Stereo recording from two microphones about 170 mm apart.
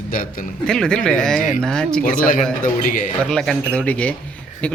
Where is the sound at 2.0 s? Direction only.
50° left (ahead or behind).